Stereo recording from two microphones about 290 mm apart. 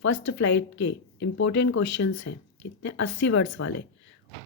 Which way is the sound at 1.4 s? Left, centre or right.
Left.